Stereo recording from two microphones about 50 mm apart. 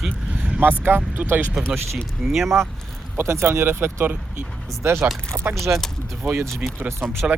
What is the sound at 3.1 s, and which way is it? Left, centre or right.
Speech, right.